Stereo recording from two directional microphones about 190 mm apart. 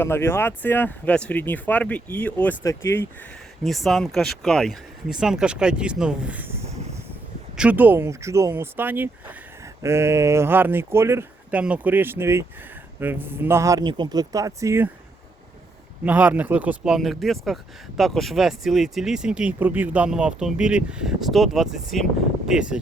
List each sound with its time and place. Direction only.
0.0 s speech: 10° left (ahead or behind)
3.6 s speech: centre (ahead or behind); by 14.8 s 15° right (ahead or behind)
16.0 s speech: 10° right (ahead or behind)